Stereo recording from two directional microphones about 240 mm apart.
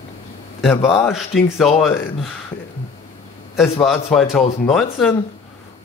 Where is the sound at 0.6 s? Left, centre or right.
Centre.